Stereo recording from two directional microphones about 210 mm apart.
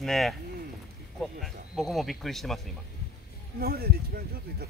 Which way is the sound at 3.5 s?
45° right (ahead or behind).